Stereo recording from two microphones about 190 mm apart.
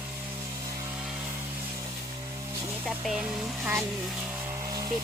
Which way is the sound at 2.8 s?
Centre (ahead or behind).